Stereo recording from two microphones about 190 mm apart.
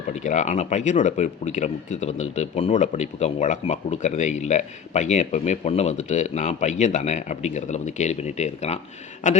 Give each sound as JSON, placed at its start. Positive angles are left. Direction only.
{"t": 0.1, "sound": "a man's voice", "side_deg": 40}